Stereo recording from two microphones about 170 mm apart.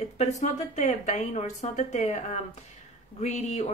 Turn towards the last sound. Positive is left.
turn(degrees=40)  # may be behind; listen again after turning